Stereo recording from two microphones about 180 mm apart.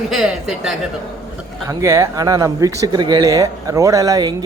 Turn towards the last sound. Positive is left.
turn(degrees=-20)  # may be behind; listen again after turning